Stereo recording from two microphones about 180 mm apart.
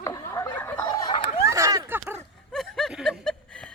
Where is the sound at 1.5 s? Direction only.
15° right (ahead or behind).